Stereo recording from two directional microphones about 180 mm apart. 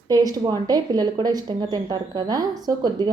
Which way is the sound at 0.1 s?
20° right (ahead or behind).